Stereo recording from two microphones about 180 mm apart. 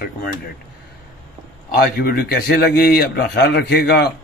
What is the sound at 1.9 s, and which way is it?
A man's voice, 55° left (ahead or behind).